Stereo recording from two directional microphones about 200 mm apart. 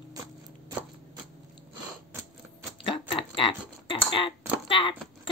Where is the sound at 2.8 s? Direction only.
25° left (ahead or behind).